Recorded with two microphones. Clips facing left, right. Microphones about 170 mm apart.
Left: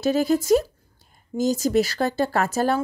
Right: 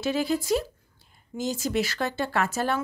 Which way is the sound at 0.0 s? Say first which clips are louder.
Left 6 dB; 40° left (ahead or behind).